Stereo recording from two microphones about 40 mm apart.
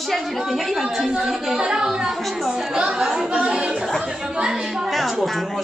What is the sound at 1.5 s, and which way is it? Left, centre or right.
Speech, centre.